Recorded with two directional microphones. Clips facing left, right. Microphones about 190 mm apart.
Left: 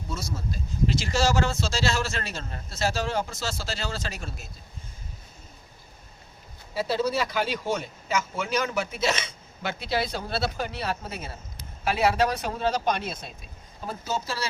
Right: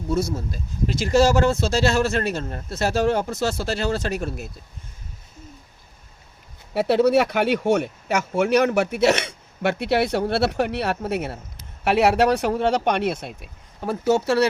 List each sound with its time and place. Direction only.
0.1 s speech: 55° right (ahead or behind)
6.7 s speech: 65° right (ahead or behind)